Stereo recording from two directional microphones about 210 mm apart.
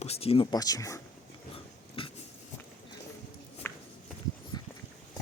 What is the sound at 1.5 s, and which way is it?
Dog, 25° left (ahead or behind).